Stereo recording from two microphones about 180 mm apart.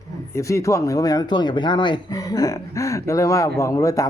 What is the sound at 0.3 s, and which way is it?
Speech, 15° left (ahead or behind).